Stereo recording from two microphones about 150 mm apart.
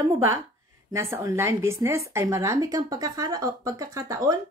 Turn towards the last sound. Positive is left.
turn(degrees=-25)  # may be behind; listen again after turning